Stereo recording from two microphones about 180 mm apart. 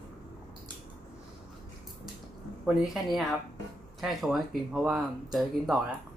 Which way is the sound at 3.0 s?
Centre (ahead or behind).